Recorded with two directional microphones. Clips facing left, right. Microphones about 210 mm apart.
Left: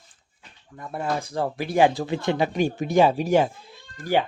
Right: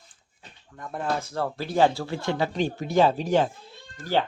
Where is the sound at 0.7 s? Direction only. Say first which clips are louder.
Left 1 dB; 10° left (ahead or behind).